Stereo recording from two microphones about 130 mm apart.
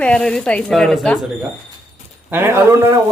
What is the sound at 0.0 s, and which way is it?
Speech, 5° left (ahead or behind).